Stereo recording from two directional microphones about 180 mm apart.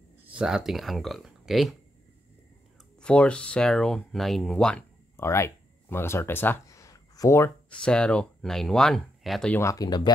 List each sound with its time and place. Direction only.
0.2 s speech: 5° right (ahead or behind)
3.0 s speech: 5° left (ahead or behind)
7.8 s speech: 5° left (ahead or behind)
9.6 s speech: 20° left (ahead or behind)